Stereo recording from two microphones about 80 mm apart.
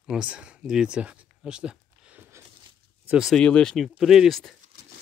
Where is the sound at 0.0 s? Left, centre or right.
Centre.